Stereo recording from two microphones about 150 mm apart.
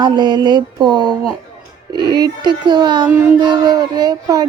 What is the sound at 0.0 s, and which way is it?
Speech, 30° right (ahead or behind).